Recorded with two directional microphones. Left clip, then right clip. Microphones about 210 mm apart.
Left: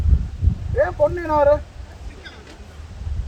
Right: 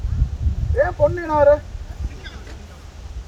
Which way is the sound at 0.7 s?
40° left (ahead or behind).